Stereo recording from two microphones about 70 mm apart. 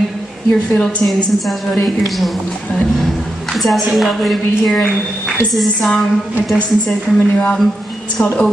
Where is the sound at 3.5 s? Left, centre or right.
Centre.